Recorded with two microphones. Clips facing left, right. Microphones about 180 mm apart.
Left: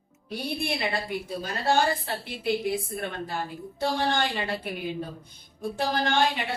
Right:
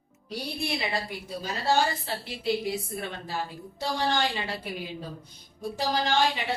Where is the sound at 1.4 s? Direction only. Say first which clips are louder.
Even; 55° left (ahead or behind).